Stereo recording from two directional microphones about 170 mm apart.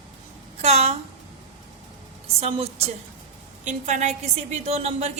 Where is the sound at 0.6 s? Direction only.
40° right (ahead or behind).